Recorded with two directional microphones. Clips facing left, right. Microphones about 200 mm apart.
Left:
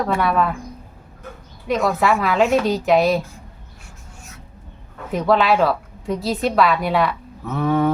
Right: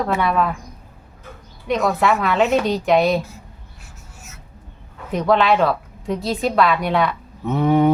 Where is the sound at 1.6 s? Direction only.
Centre (ahead or behind).